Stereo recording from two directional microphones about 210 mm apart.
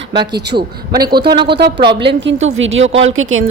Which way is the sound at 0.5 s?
35° right (ahead or behind).